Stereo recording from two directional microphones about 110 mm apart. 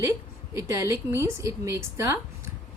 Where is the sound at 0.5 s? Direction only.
25° right (ahead or behind).